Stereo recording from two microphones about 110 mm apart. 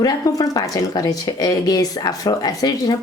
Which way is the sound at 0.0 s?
30° left (ahead or behind).